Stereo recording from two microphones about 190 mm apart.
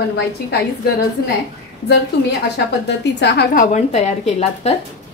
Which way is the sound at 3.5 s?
35° left (ahead or behind).